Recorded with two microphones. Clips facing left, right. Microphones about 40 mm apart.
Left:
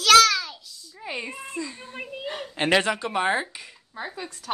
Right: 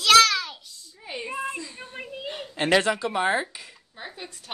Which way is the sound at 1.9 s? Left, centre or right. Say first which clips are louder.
Even; centre.